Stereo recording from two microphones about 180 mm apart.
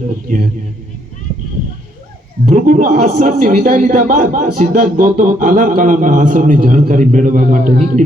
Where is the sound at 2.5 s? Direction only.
45° right (ahead or behind).